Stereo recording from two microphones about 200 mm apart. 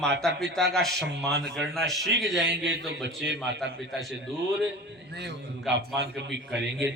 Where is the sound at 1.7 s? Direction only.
Centre (ahead or behind).